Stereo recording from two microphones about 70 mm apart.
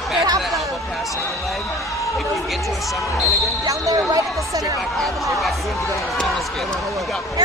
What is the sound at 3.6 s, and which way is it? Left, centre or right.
Speech, right.